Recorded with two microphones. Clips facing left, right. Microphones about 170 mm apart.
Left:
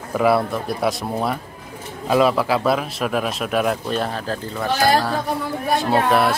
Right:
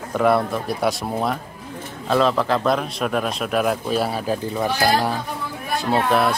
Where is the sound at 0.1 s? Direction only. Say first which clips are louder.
Left 1 dB; 5° left (ahead or behind); by 5.1 s 15° right (ahead or behind).